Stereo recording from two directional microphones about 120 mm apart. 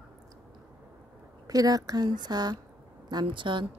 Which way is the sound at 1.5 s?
30° right (ahead or behind).